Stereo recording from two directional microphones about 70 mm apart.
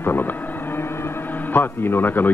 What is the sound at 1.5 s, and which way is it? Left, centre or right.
Speech, left.